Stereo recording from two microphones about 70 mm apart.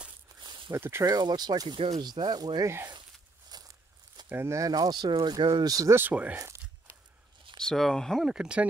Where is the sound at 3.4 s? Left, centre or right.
Right.